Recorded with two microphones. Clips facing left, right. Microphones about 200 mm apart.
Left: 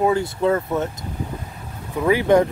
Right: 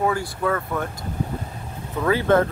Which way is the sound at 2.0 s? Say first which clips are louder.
Left 3 dB; 15° left (ahead or behind).